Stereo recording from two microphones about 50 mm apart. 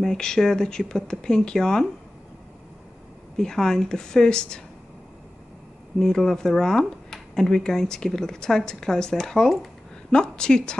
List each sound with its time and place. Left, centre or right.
0.0 s speech: centre
3.3 s speech: centre
5.9 s speech: centre